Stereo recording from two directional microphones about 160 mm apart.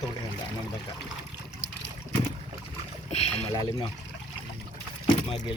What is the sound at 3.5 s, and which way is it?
Speech, 25° left (ahead or behind).